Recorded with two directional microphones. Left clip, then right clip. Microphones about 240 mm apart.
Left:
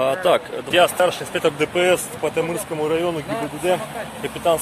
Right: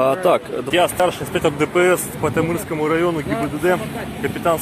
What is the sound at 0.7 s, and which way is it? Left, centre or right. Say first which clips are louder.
Speech: left 1 dB; centre.